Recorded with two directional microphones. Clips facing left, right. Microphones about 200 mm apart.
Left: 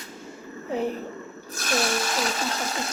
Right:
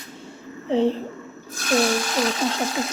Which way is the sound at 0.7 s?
30° right (ahead or behind).